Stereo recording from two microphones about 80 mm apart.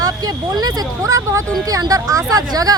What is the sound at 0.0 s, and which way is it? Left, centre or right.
Speech, right.